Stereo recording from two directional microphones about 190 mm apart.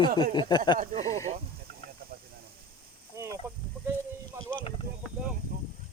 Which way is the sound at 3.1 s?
15° right (ahead or behind).